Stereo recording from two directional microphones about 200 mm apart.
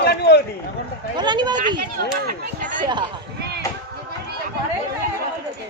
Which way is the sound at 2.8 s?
25° right (ahead or behind).